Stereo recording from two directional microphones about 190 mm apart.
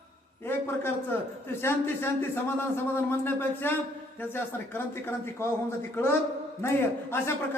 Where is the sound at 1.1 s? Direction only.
10° left (ahead or behind).